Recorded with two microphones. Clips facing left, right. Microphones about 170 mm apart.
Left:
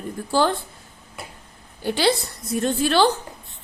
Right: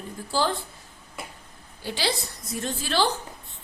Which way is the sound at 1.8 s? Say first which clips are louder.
Left 8 dB; 60° left (ahead or behind).